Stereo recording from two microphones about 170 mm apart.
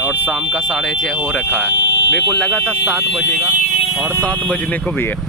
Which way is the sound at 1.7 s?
90° left.